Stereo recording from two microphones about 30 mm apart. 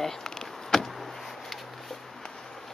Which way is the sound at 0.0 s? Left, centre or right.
Centre.